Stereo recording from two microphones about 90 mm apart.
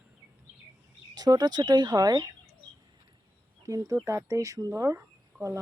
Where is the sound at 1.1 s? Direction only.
45° right (ahead or behind).